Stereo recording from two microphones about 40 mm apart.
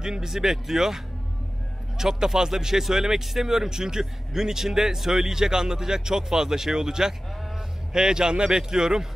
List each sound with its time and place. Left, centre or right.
0.0 s speech: centre